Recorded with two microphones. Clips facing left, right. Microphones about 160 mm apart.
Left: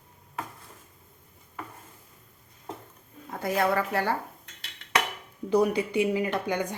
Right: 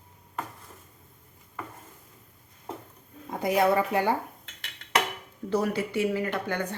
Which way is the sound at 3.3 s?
15° right (ahead or behind).